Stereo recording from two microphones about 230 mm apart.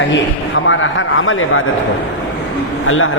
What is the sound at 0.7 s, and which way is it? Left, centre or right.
Speech, left.